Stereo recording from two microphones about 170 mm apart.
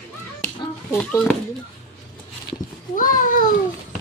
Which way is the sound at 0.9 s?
10° left (ahead or behind).